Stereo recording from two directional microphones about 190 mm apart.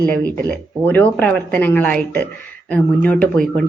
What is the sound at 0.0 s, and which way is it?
A woman's voice, 10° left (ahead or behind).